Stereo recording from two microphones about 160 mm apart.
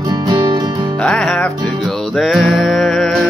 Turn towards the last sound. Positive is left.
turn(degrees=0)  # may be behind; listen again after turning